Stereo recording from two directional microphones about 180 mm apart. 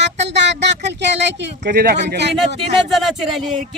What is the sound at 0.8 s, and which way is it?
Speech, 75° right (ahead or behind).